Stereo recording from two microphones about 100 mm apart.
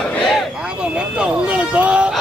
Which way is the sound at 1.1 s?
10° right (ahead or behind).